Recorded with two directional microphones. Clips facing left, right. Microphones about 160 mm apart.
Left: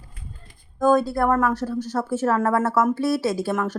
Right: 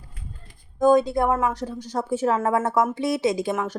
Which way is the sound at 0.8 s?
20° right (ahead or behind).